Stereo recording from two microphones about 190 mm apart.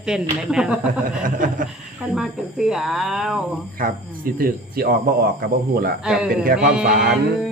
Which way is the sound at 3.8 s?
50° right (ahead or behind).